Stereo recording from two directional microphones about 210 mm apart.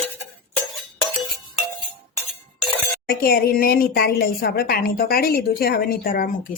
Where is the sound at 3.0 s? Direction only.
45° left (ahead or behind).